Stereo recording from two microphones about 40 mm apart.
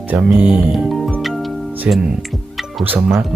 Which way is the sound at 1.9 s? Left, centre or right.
Right.